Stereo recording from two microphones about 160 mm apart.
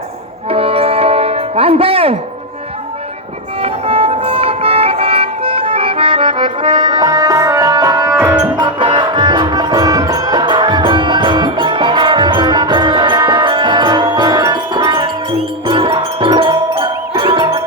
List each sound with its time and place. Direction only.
0.5 s music: 35° right (ahead or behind)
3.6 s music: 40° right (ahead or behind)